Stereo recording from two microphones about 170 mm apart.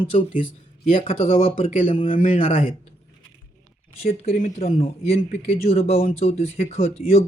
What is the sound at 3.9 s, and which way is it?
Speech, 40° left (ahead or behind).